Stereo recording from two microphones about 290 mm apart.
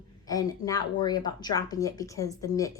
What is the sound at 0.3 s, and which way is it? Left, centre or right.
Speech, centre.